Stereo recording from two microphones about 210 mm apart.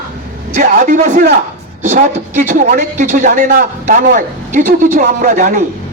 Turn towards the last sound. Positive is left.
turn(degrees=-35)  # may be behind; listen again after turning